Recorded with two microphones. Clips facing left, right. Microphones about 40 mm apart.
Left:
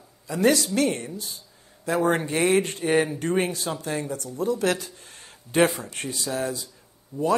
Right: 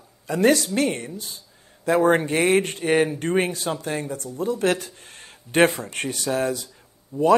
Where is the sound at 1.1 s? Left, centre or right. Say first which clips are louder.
Even; right.